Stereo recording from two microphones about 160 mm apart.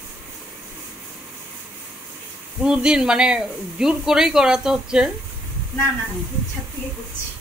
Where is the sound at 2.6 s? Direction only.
5° right (ahead or behind).